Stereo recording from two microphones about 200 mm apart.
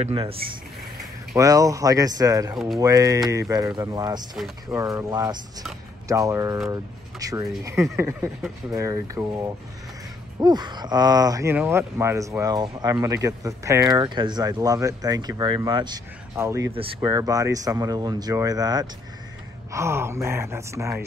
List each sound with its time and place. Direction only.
0.0 s speech: 25° right (ahead or behind)
1.3 s speech: 15° right (ahead or behind)